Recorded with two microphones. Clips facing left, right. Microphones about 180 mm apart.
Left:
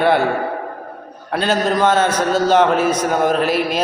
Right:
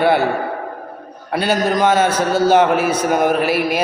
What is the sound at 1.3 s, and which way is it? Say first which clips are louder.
A man's voice: even; 10° right (ahead or behind).